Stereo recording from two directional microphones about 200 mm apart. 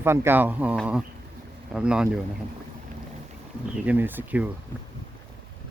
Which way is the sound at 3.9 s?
10° right (ahead or behind).